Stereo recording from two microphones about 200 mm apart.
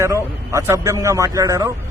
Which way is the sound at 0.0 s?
15° right (ahead or behind).